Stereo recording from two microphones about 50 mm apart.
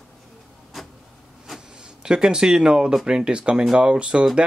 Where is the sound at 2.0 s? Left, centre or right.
Centre.